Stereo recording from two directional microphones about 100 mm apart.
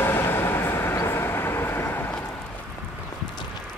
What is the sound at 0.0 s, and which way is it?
Vehicle, 25° left (ahead or behind).